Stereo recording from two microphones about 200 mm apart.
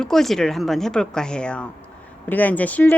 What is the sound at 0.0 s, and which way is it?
Speech, centre (ahead or behind).